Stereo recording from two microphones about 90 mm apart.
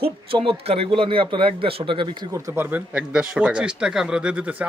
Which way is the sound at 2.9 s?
10° right (ahead or behind).